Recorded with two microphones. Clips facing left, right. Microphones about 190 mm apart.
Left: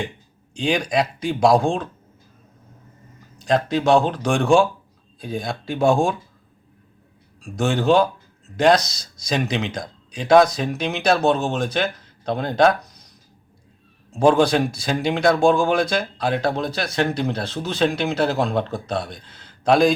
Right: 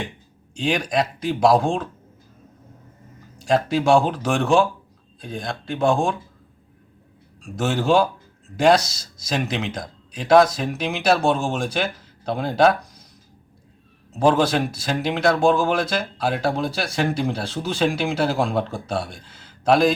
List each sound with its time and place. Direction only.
0.5 s speech: centre (ahead or behind)
3.4 s speech: 5° right (ahead or behind)
7.4 s speech: 5° right (ahead or behind)
14.1 s speech: 5° right (ahead or behind)